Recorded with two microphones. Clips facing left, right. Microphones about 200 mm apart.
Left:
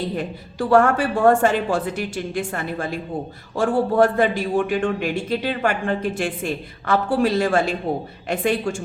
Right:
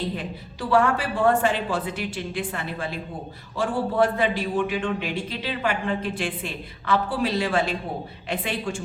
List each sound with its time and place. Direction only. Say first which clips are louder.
0.2 s a man's voice: left 7 dB; 45° left (ahead or behind)